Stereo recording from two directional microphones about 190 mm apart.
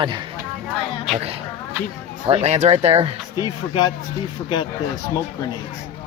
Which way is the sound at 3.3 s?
20° left (ahead or behind).